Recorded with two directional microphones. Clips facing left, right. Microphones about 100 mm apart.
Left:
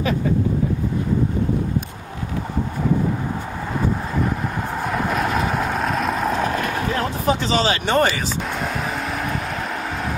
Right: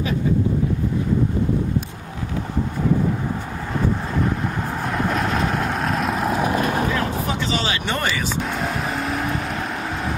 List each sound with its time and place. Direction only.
4.8 s vehicle: centre (ahead or behind)
6.4 s vehicle: 20° right (ahead or behind)
6.9 s a sound: 35° left (ahead or behind)
8.5 s vehicle: centre (ahead or behind)